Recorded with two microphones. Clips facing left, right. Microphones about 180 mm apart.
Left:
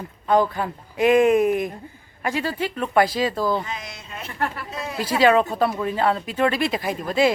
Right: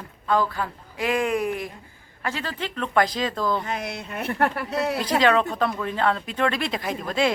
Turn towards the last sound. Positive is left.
turn(degrees=5)  # may be behind; listen again after turning